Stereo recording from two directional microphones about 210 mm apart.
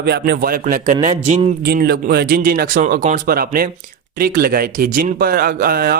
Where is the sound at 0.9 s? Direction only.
30° right (ahead or behind).